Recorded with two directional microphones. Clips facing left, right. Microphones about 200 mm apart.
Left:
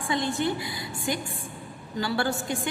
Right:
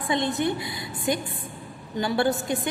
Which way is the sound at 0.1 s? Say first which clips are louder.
Right 2 dB; 20° right (ahead or behind).